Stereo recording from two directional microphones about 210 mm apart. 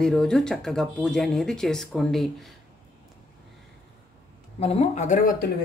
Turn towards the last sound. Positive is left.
turn(degrees=35)  # may be behind; listen again after turning